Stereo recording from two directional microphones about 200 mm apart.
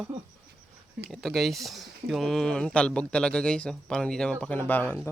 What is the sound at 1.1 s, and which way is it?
Speech, centre (ahead or behind).